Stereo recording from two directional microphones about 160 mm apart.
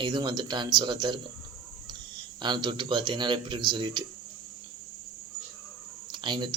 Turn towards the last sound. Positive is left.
turn(degrees=-30)  # may be behind; listen again after turning